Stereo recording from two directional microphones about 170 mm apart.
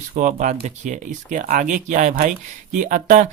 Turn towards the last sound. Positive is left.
turn(degrees=-45)  # may be behind; listen again after turning